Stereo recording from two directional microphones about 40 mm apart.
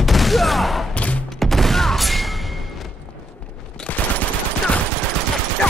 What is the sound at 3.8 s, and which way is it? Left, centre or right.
Machine gun, centre.